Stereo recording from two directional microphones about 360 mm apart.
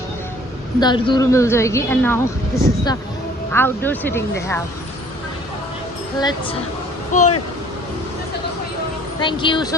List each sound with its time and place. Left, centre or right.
0.8 s a woman's voice: centre
6.1 s a woman's voice: centre
9.2 s a woman's voice: centre